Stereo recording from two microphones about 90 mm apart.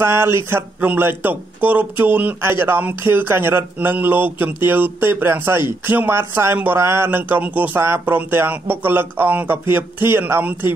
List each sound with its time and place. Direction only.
0.0 s a man's voice: 25° right (ahead or behind)